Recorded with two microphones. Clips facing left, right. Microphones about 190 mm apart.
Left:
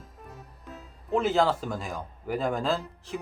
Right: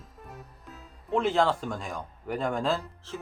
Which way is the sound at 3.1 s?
15° left (ahead or behind).